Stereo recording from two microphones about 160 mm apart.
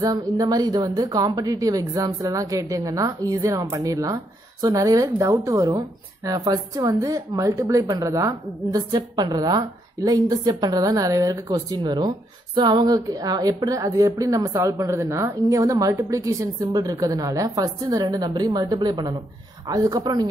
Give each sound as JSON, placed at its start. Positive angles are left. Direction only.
{"t": 0.0, "sound": "a woman's voice", "side_deg": -25}